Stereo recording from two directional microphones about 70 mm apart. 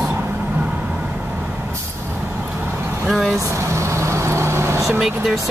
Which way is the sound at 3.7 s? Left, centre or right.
Right.